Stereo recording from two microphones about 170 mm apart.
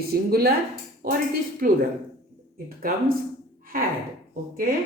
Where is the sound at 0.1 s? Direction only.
65° right (ahead or behind).